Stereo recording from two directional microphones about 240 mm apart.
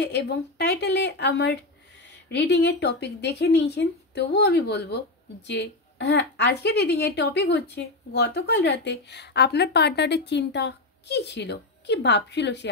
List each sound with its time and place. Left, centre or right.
0.0 s a woman's voice: left